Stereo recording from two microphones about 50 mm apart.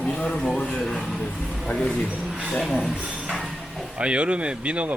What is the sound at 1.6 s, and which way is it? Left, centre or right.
Speech, left.